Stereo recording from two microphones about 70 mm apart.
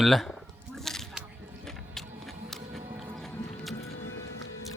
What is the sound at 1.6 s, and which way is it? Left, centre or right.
Music, centre.